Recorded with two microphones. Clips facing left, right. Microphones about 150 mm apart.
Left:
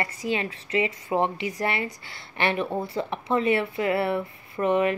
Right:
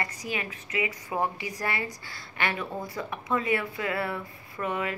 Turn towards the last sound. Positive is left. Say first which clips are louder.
# left 8 dB
turn(degrees=25)  # may be behind; listen again after turning